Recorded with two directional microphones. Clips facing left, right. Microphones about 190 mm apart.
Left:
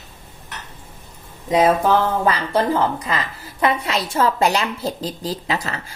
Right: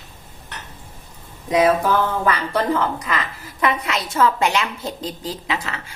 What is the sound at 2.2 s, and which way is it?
A woman's voice, 30° left (ahead or behind).